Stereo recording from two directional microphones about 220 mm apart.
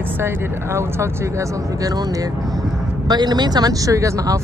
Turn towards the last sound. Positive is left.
turn(degrees=-15)  # may be behind; listen again after turning